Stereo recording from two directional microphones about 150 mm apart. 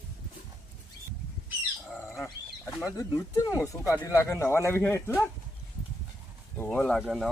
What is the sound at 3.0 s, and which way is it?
Speech, 20° left (ahead or behind).